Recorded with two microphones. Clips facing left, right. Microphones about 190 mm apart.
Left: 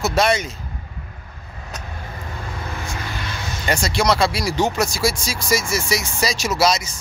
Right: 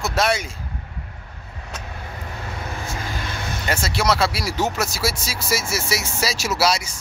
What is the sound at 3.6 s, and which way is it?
Speech, 5° right (ahead or behind).